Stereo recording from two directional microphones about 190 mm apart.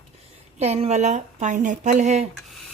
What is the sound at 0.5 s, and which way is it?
A woman's voice, 35° right (ahead or behind).